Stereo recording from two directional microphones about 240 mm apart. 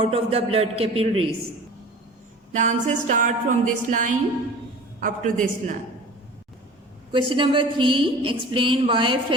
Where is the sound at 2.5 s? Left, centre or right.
Right.